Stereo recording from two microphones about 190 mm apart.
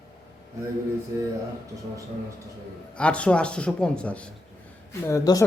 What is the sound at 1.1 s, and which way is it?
Speech, 15° right (ahead or behind).